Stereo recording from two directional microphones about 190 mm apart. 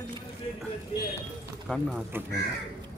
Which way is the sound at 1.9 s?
10° right (ahead or behind).